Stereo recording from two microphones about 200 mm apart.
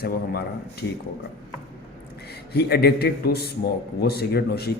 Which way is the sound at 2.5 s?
55° left (ahead or behind).